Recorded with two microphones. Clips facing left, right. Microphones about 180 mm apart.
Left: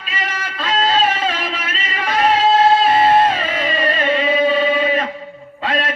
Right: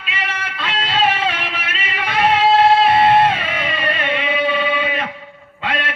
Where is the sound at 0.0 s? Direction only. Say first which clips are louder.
Left 1 dB; 40° left (ahead or behind).